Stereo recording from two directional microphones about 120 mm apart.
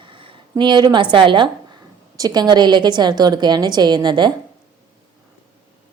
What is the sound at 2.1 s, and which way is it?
A woman's voice, 30° right (ahead or behind).